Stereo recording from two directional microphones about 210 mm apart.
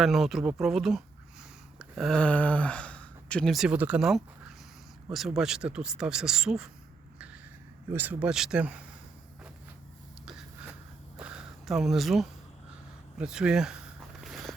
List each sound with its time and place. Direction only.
0.0 s speech: centre (ahead or behind)
7.9 s speech: 5° right (ahead or behind)
10.2 s a sound: centre (ahead or behind)
13.1 s speech: 5° right (ahead or behind)
14.3 s biting: centre (ahead or behind)